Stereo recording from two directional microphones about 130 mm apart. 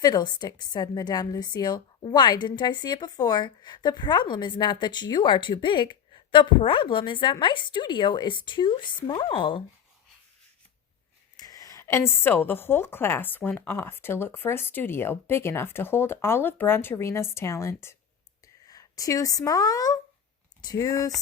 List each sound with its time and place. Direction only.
0.0 s a woman's voice: 30° left (ahead or behind)
11.3 s a woman's voice: 30° left (ahead or behind)